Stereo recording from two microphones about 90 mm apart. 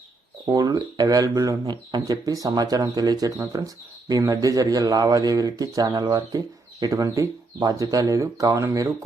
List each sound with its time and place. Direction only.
0.5 s a man's voice: 45° right (ahead or behind)